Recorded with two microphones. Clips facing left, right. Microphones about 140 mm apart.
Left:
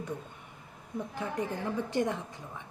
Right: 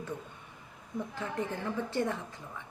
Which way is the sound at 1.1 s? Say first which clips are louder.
Left 2 dB; 15° left (ahead or behind).